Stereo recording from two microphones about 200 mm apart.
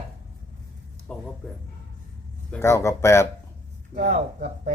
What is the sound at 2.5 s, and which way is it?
Speech, 15° left (ahead or behind).